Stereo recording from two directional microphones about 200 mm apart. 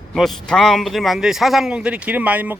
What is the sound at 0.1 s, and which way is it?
Speech, centre (ahead or behind).